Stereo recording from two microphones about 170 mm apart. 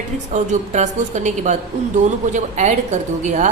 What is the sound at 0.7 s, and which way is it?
A woman's voice, 45° right (ahead or behind).